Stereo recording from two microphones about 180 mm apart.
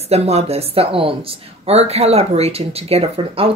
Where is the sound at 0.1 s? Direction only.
35° right (ahead or behind).